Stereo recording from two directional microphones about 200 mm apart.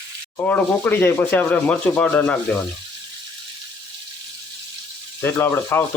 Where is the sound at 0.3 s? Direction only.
10° left (ahead or behind).